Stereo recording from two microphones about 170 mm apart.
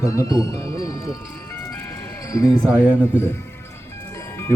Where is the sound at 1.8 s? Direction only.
20° left (ahead or behind).